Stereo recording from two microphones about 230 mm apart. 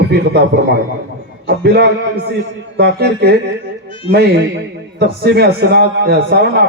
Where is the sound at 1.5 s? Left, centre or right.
Right.